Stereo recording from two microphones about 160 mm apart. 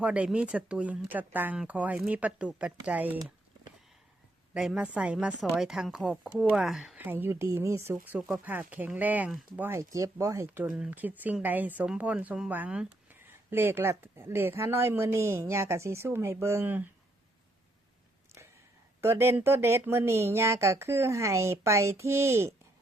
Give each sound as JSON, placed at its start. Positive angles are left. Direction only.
{"t": 0.0, "sound": "speech", "side_deg": -5}
{"t": 4.5, "sound": "speech", "side_deg": -5}
{"t": 18.3, "sound": "a sound", "side_deg": -15}
{"t": 19.0, "sound": "speech", "side_deg": -15}